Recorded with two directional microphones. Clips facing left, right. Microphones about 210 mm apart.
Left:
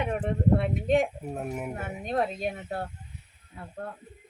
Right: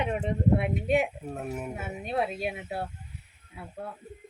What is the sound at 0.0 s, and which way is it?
A woman's voice, 15° right (ahead or behind).